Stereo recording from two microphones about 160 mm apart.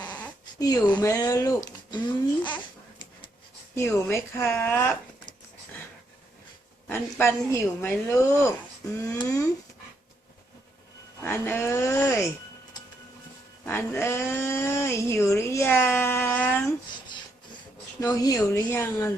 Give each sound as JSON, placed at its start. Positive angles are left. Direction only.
{"t": 0.9, "sound": "a sound", "side_deg": 20}
{"t": 3.8, "sound": "speech", "side_deg": 15}
{"t": 4.4, "sound": "speech", "side_deg": 5}
{"t": 6.8, "sound": "speech", "side_deg": 15}
{"t": 11.2, "sound": "speech", "side_deg": 15}
{"t": 13.7, "sound": "speech", "side_deg": 10}
{"t": 18.0, "sound": "speech", "side_deg": 20}